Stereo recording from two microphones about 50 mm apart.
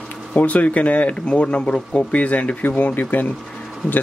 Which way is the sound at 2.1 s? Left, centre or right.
Left.